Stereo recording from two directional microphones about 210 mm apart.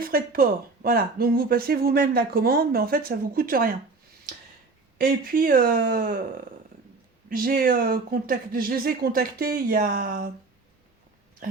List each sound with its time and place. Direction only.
0.0 s speech: 45° right (ahead or behind)
4.9 s speech: 45° right (ahead or behind)
7.3 s speech: 45° right (ahead or behind)